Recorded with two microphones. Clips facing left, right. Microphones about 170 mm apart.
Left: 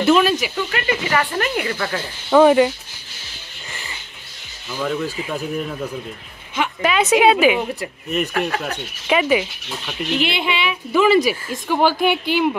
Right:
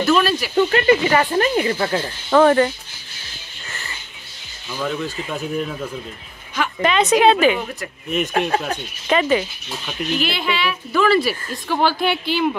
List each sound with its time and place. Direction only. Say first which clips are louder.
0.0 s speech: left 2 dB; 15° left (ahead or behind)
0.6 s speech: right 8 dB; 35° right (ahead or behind)
2.2 s speech: left 2 dB; 10° left (ahead or behind)
4.6 s speech: left 1 dB; centre (ahead or behind)
8.3 s speech: right 2 dB; 25° right (ahead or behind)
9.0 s speech: even; 10° left (ahead or behind)
10.1 s a woman's voice: left 1 dB; 20° left (ahead or behind)